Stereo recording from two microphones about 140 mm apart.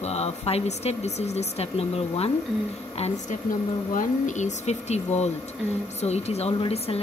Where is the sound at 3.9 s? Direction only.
65° left (ahead or behind); by 7.0 s 45° left (ahead or behind).